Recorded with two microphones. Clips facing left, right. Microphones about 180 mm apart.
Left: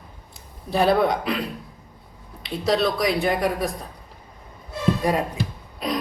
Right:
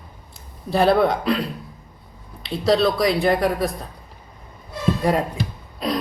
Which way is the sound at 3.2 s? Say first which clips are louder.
Right 3 dB; 15° left (ahead or behind).